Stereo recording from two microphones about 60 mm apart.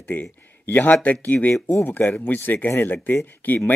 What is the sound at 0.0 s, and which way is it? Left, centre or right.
Speech, left.